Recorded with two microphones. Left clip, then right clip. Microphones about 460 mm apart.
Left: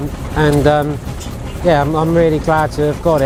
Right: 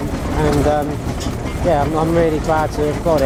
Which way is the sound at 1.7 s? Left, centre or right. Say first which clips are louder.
Left 2 dB; left.